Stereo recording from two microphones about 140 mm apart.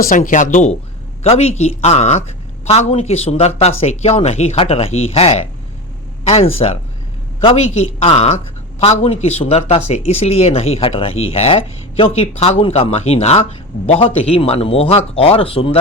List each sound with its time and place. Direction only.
0.0 s speech: 80° left; by 0.8 s 60° left (ahead or behind)
1.2 s speech: 45° left (ahead or behind)